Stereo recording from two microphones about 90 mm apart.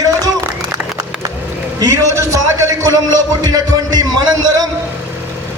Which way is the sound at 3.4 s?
45° right (ahead or behind).